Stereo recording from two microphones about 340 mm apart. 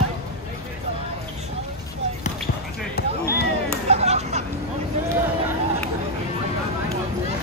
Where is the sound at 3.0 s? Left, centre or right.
Left.